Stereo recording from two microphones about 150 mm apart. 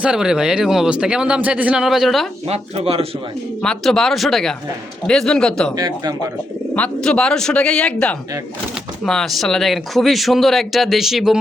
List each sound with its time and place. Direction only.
0.0 s speech: 5° right (ahead or behind)
2.5 s speech: 40° right (ahead or behind)
3.6 s speech: 5° left (ahead or behind)
5.7 s speech: 25° right (ahead or behind)
6.7 s speech: 5° left (ahead or behind)